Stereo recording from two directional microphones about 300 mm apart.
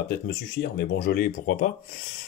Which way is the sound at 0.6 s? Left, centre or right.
Left.